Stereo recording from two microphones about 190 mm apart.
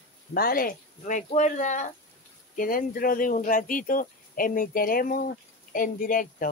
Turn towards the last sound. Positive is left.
turn(degrees=45)  # may be behind; listen again after turning